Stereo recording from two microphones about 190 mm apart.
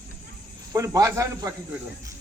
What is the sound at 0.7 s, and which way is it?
Speech, 15° right (ahead or behind).